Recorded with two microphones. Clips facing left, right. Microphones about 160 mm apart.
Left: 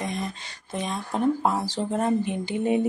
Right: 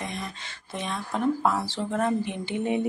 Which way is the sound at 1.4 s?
25° left (ahead or behind).